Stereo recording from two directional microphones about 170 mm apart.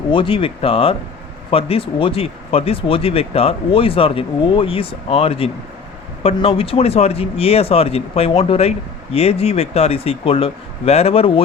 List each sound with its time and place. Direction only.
0.1 s speech: 30° left (ahead or behind)